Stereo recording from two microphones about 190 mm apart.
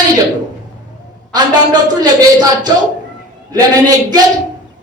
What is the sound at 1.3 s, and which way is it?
A woman's voice, 20° right (ahead or behind).